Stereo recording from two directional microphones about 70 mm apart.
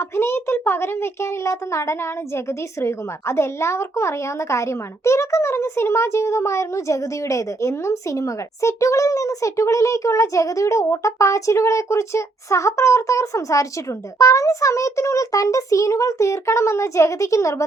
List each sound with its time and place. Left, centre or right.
0.0 s a child's voice: left